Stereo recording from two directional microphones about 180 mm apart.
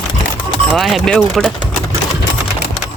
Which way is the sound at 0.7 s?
Centre (ahead or behind).